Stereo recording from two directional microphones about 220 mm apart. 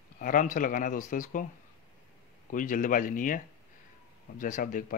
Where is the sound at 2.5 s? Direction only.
35° left (ahead or behind).